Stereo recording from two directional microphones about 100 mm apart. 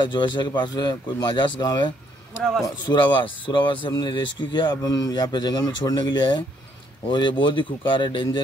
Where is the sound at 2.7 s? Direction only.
50° left (ahead or behind).